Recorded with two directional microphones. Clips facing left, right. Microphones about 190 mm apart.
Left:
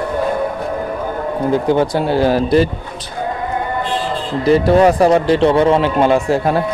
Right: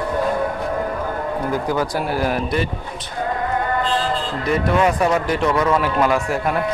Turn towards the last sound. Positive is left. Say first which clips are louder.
# left 6 dB
turn(degrees=30)  # may be behind; listen again after turning